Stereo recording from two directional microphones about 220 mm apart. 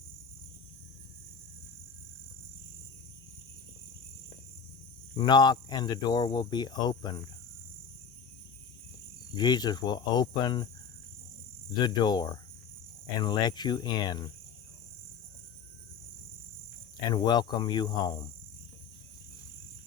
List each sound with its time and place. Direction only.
5.1 s speech: 20° left (ahead or behind)
9.3 s speech: 20° left (ahead or behind)
11.8 s speech: 20° left (ahead or behind)
17.1 s speech: 20° left (ahead or behind)